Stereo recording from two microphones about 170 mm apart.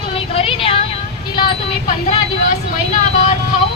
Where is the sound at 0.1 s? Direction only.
35° left (ahead or behind).